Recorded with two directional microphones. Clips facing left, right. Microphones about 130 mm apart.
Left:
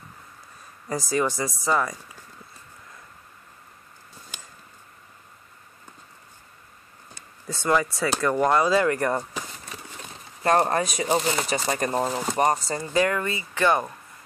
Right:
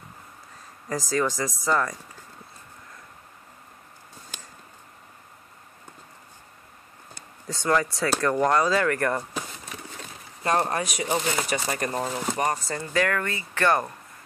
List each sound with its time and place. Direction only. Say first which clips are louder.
0.8 s speech: left 1 dB; 10° left (ahead or behind)
7.6 s speech: left 1 dB; 5° left (ahead or behind); by 9.2 s 20° left (ahead or behind)
10.4 s speech: left 4 dB; 35° left (ahead or behind)
12.8 s speech: left 2 dB; 20° left (ahead or behind)